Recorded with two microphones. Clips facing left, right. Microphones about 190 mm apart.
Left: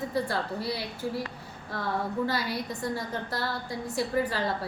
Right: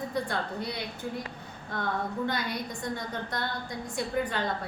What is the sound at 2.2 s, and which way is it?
A woman's voice, 5° left (ahead or behind).